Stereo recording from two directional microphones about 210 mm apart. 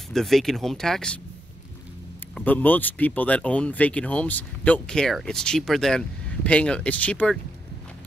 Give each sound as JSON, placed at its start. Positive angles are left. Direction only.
{"t": 0.1, "sound": "speech", "side_deg": 0}
{"t": 2.3, "sound": "speech", "side_deg": 5}